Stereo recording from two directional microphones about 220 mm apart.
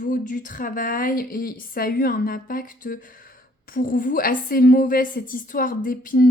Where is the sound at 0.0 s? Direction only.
35° left (ahead or behind).